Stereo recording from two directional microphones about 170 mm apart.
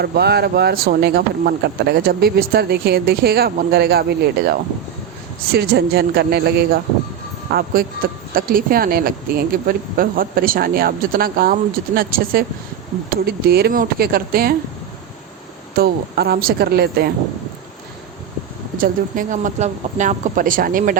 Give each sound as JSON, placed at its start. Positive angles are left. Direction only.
{"t": 0.0, "sound": "speech", "side_deg": -70}
{"t": 7.5, "sound": "a woman's voice", "side_deg": -60}
{"t": 15.7, "sound": "a woman's voice", "side_deg": -65}
{"t": 18.8, "sound": "speech", "side_deg": -50}